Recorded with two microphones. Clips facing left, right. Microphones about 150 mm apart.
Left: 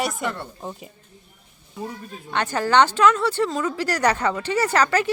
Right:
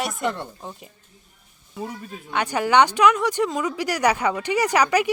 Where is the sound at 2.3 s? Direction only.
10° right (ahead or behind).